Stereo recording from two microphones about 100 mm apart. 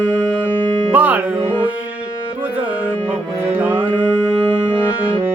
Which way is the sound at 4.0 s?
15° left (ahead or behind).